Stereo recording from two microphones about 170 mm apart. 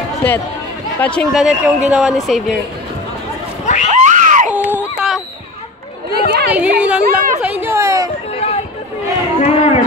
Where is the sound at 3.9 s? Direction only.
45° right (ahead or behind).